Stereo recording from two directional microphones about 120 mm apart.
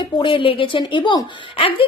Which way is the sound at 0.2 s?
45° left (ahead or behind).